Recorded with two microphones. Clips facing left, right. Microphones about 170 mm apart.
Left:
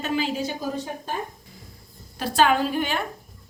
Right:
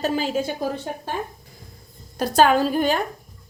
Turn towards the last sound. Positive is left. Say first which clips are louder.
# right 4 dB
turn(degrees=-40)  # may be behind; listen again after turning